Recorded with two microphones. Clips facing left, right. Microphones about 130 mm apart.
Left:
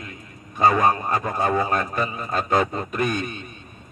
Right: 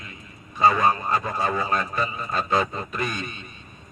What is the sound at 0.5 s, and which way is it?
A man's voice, 45° left (ahead or behind).